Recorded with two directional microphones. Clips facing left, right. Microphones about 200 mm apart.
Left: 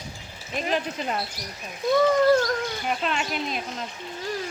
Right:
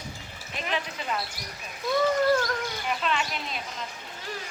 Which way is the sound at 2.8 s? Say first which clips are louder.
Right 1 dB; 45° left (ahead or behind).